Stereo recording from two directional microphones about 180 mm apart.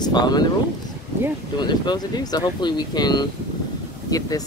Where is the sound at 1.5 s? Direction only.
25° left (ahead or behind).